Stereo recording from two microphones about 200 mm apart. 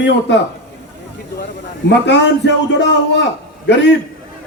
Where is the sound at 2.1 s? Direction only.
60° left (ahead or behind).